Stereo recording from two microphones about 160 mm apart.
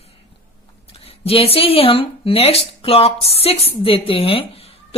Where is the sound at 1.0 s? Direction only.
35° left (ahead or behind).